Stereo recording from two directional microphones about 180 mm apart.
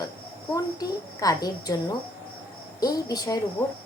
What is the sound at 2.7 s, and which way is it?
Speech, 20° left (ahead or behind).